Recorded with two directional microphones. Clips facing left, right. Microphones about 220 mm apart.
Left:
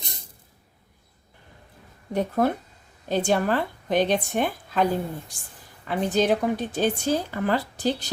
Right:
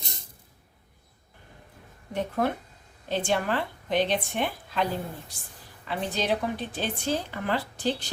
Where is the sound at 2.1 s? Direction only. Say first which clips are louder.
Left 4 dB; 40° left (ahead or behind).